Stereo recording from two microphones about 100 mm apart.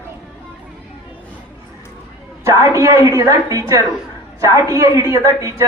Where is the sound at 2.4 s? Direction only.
30° right (ahead or behind).